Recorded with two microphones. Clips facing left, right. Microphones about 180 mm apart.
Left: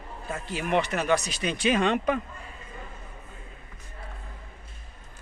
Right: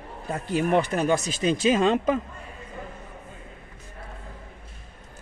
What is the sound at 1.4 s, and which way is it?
Speech, 30° right (ahead or behind).